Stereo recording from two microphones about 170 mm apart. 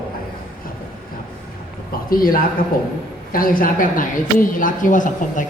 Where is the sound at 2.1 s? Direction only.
55° left (ahead or behind).